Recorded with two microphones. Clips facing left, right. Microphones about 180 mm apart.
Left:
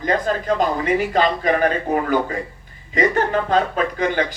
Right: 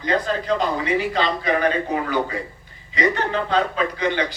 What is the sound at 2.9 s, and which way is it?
A man's voice, 45° left (ahead or behind).